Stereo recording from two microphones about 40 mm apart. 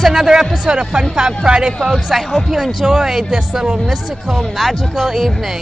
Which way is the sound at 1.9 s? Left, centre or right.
Centre.